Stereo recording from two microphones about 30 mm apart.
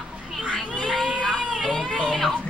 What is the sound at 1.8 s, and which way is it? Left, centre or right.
Speech, centre.